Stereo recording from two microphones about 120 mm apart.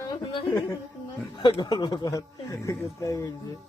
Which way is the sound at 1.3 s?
35° left (ahead or behind).